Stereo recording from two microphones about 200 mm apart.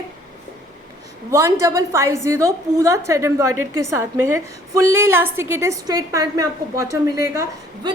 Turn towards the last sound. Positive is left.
turn(degrees=-20)  # may be behind; listen again after turning